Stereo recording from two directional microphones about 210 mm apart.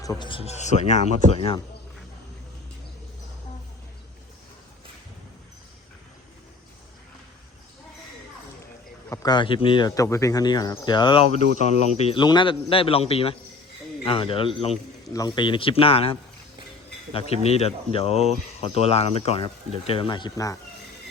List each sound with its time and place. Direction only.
0.0 s speech: 20° left (ahead or behind)
9.0 s speech: 15° left (ahead or behind)